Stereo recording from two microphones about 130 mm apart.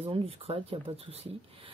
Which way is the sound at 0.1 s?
45° right (ahead or behind).